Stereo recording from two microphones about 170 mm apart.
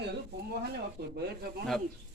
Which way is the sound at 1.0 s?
70° right (ahead or behind).